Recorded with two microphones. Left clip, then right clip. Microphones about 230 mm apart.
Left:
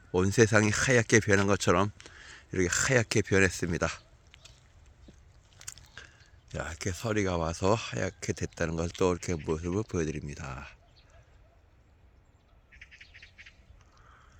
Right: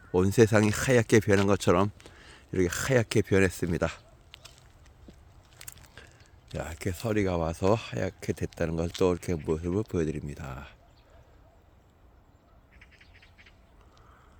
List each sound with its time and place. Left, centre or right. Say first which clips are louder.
0.1 s speech: right 2 dB; centre
5.5 s biting: left 2 dB; centre
6.5 s speech: right 1 dB; centre
12.7 s bird: left 5 dB; right